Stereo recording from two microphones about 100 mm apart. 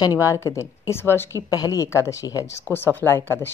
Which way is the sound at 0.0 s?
35° left (ahead or behind).